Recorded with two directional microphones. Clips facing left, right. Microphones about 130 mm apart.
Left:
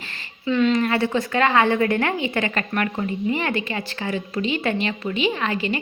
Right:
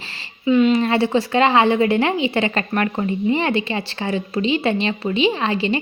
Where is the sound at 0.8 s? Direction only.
25° right (ahead or behind).